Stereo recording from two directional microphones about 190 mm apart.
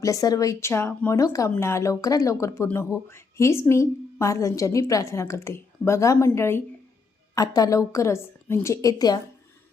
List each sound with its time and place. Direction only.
0.0 s a woman's voice: 20° left (ahead or behind)